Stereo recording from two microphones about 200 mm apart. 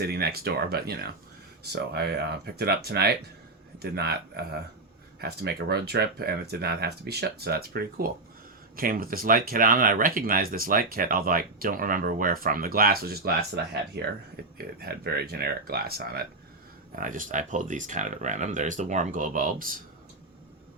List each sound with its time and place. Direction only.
0.0 s speech: 50° right (ahead or behind)
14.6 s speech: 50° right (ahead or behind)